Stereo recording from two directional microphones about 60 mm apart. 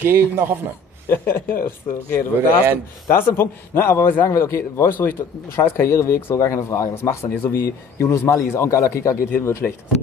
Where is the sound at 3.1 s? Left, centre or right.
Left.